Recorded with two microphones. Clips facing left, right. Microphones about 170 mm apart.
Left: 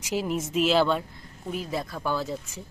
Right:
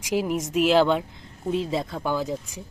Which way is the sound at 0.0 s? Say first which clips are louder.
Right 3 dB; 10° right (ahead or behind).